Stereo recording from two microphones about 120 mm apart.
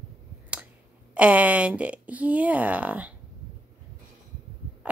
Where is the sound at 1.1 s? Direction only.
10° right (ahead or behind).